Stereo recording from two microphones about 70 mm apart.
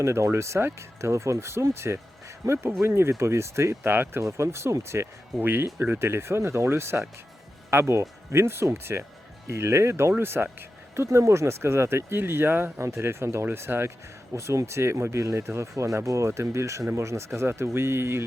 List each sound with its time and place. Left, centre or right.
0.0 s speech: right
4.2 s speech: right
14.3 s speech: right